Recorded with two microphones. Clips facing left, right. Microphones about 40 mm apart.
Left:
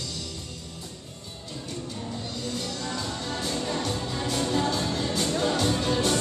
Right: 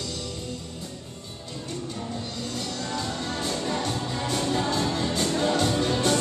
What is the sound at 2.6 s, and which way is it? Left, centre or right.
Music, centre.